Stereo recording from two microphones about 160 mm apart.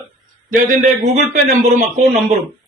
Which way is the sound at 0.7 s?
45° right (ahead or behind).